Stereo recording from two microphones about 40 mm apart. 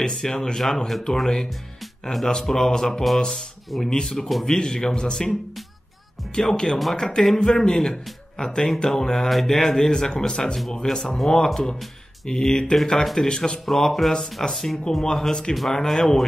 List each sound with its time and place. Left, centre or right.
0.0 s speech: centre
6.3 s speech: centre